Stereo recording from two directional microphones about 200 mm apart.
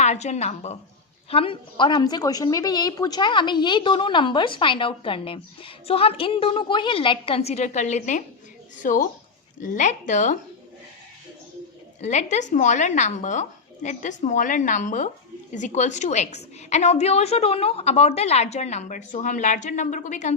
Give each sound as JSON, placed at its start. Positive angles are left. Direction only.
{"t": 0.0, "sound": "a woman's voice", "side_deg": 35}
{"t": 12.0, "sound": "a woman's voice", "side_deg": 35}